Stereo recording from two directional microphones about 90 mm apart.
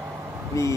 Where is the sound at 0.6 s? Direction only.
35° left (ahead or behind).